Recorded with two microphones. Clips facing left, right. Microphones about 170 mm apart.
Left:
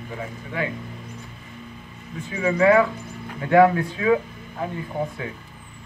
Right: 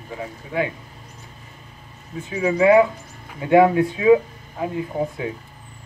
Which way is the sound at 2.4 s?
20° right (ahead or behind).